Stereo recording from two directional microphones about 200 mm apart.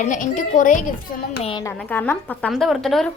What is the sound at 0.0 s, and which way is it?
Speech, 40° left (ahead or behind).